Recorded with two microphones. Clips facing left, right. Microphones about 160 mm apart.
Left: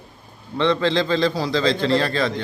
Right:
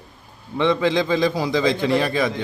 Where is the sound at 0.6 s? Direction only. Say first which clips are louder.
Even; 15° right (ahead or behind).